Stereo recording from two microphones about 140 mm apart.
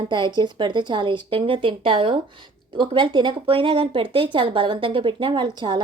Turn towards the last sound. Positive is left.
turn(degrees=-35)  # may be behind; listen again after turning